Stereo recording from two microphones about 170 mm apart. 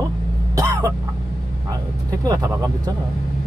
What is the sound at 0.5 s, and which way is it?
Cough, 20° right (ahead or behind).